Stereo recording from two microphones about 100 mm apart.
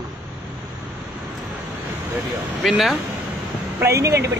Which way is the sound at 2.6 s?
Centre (ahead or behind).